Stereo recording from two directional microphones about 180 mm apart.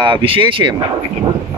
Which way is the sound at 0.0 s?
30° right (ahead or behind).